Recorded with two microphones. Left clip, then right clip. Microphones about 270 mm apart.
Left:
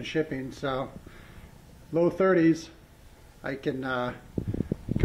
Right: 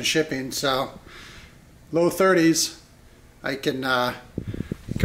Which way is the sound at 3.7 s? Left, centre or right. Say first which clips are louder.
Right 7 dB; centre.